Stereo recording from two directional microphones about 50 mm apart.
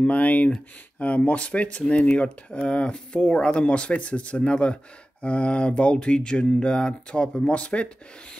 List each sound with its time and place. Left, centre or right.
0.0 s speech: left